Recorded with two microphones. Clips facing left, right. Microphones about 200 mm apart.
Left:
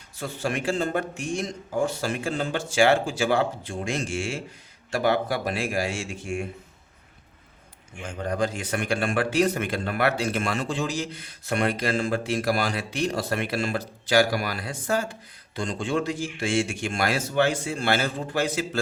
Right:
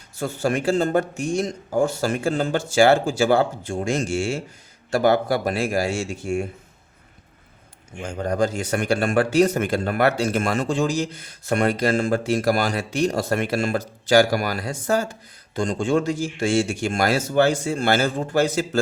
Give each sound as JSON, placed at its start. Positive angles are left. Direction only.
{"t": 0.2, "sound": "speech", "side_deg": -45}
{"t": 8.0, "sound": "speech", "side_deg": -45}